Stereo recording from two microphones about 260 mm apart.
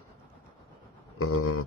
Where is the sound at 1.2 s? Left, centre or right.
Left.